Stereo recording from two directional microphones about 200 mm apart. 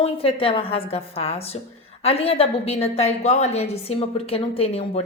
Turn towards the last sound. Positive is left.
turn(degrees=30)  # may be behind; listen again after turning